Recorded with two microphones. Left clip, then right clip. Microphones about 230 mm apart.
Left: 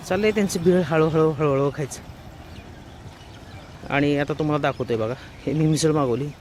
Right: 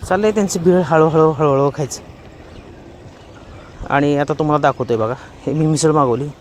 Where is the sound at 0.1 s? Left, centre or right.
Centre.